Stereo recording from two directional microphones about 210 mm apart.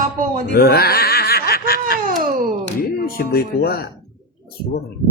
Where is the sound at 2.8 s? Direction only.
45° left (ahead or behind).